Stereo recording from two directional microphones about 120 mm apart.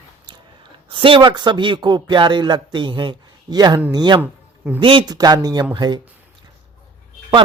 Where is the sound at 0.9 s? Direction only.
45° right (ahead or behind).